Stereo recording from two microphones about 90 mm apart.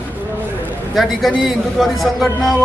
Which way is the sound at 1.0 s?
Centre (ahead or behind).